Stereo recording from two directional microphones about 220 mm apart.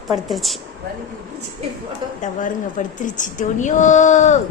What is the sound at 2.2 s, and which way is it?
A woman's voice, 35° left (ahead or behind).